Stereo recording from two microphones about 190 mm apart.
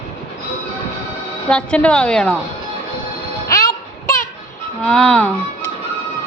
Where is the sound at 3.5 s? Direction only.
15° left (ahead or behind).